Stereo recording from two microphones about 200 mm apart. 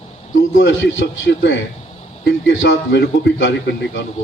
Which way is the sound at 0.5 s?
65° left (ahead or behind).